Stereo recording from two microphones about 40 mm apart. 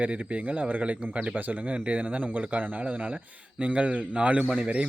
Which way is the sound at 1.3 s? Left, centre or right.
Right.